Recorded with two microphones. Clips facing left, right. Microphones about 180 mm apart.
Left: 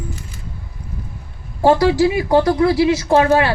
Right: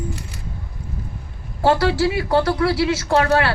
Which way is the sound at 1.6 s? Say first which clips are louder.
Left 4 dB; 20° left (ahead or behind).